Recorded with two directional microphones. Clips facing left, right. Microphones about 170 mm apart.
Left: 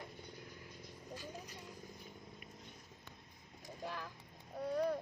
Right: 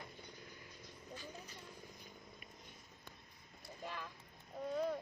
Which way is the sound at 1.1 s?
5° left (ahead or behind).